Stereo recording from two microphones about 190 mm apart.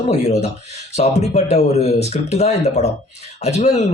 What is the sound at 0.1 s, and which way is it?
Speech, 35° left (ahead or behind).